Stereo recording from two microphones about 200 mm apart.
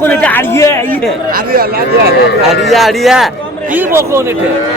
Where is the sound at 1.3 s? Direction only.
45° right (ahead or behind).